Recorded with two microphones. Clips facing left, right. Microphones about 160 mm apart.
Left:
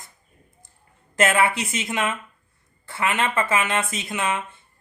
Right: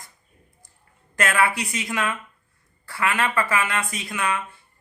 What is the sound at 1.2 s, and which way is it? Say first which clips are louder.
Speech: left 2 dB; 25° left (ahead or behind).